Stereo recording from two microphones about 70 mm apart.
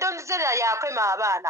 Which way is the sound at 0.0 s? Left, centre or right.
Right.